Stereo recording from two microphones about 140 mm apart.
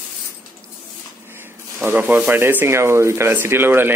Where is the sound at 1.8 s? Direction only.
15° right (ahead or behind).